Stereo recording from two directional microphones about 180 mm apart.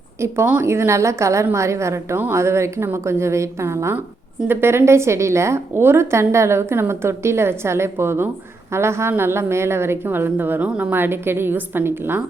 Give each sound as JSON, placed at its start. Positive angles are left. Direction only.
{"t": 0.2, "sound": "a woman's voice", "side_deg": -10}